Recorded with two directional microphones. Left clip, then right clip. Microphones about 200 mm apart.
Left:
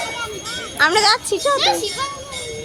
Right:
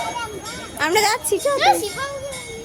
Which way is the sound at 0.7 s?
5° right (ahead or behind).